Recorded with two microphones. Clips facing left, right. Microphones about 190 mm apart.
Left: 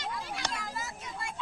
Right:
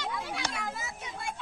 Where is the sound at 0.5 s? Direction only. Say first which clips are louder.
Right 1 dB; 60° right (ahead or behind).